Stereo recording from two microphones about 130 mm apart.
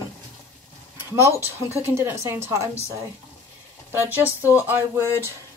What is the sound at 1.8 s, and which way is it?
Speech, 20° right (ahead or behind).